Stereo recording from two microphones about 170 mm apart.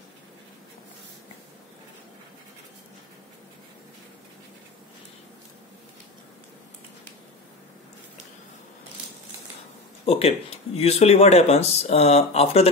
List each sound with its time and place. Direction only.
10.0 s speech: 35° left (ahead or behind)